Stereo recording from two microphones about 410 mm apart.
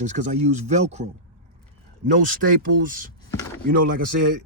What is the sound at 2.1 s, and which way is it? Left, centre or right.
Speech, centre.